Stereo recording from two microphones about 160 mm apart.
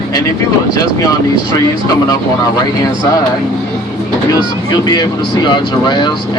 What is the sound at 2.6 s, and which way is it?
Speech, 25° left (ahead or behind).